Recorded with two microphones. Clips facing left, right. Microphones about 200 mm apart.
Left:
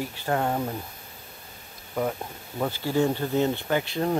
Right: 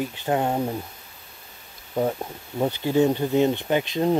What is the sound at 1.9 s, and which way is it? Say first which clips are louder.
Speech: right 4 dB; 25° right (ahead or behind).